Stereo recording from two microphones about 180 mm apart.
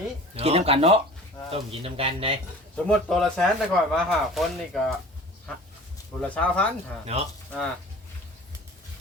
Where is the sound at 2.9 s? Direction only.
Centre (ahead or behind).